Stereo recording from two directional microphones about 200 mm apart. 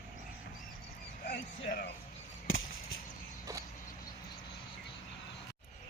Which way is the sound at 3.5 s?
15° right (ahead or behind).